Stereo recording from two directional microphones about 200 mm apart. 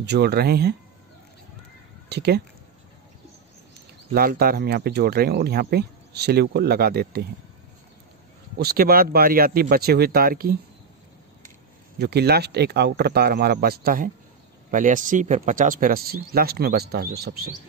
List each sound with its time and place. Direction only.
0.0 s speech: 55° right (ahead or behind)
2.0 s speech: 55° right (ahead or behind)
4.1 s speech: 50° right (ahead or behind)
8.5 s speech: 50° right (ahead or behind)
12.0 s speech: 55° right (ahead or behind)